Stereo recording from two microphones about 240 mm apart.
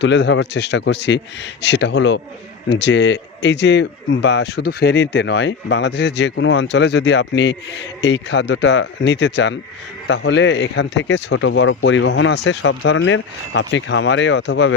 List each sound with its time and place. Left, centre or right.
0.0 s speech: left